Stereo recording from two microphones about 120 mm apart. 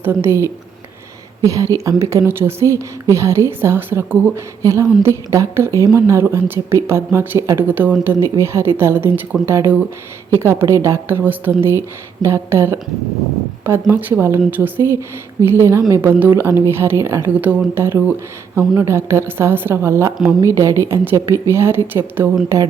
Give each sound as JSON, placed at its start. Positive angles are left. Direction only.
{"t": 0.0, "sound": "a woman's voice", "side_deg": -20}